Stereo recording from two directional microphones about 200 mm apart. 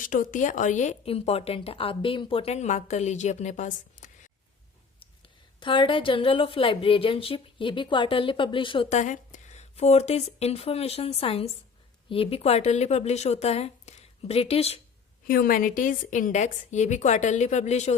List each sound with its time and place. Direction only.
0.0 s speech: 40° left (ahead or behind)
5.5 s a woman's voice: 25° left (ahead or behind)
15.3 s speech: 45° left (ahead or behind)